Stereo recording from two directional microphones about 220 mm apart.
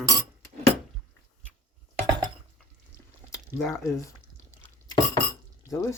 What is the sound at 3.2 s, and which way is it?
Squish, 15° left (ahead or behind).